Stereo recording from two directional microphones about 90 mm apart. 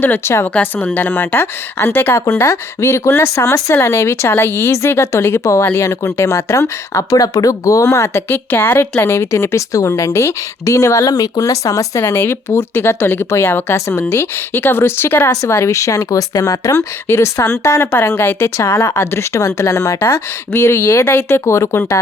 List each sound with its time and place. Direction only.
0.0 s a woman's voice: 25° left (ahead or behind)
15.3 s a woman's voice: 40° left (ahead or behind)